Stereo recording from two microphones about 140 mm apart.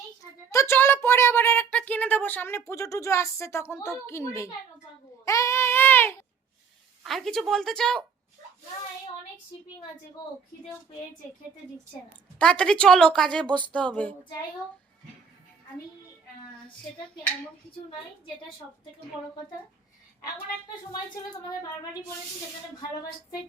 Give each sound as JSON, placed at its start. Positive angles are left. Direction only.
{"t": 0.2, "sound": "speech", "side_deg": 20}
{"t": 5.2, "sound": "a sound", "side_deg": 20}
{"t": 7.0, "sound": "a woman's voice", "side_deg": 0}
{"t": 12.4, "sound": "a woman's voice", "side_deg": 5}
{"t": 13.7, "sound": "female singing", "side_deg": 10}